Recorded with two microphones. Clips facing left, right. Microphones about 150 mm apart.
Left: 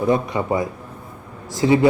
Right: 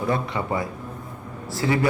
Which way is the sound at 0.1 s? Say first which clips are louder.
Left 5 dB; 20° left (ahead or behind).